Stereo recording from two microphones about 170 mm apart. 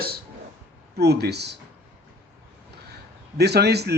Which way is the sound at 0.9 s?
70° right (ahead or behind).